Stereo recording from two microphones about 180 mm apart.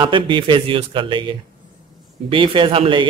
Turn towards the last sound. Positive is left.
turn(degrees=-30)  # may be behind; listen again after turning